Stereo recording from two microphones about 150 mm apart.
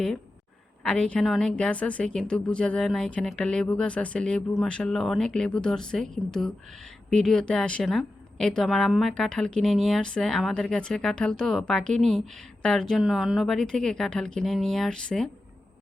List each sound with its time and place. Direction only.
0.8 s a woman's voice: 5° left (ahead or behind)